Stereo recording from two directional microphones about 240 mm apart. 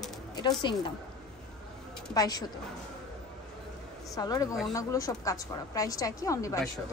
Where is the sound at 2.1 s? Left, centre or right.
Centre.